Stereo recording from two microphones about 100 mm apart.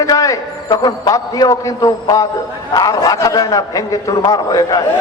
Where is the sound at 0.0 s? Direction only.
35° left (ahead or behind).